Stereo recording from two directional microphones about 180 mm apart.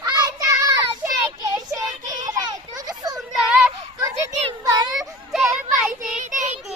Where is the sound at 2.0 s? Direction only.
20° right (ahead or behind).